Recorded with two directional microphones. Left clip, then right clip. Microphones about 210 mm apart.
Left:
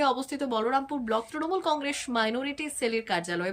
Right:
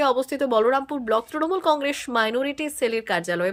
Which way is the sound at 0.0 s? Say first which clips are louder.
Right 6 dB; 15° right (ahead or behind).